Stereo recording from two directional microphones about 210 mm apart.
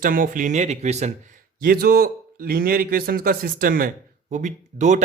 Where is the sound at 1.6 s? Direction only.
45° right (ahead or behind).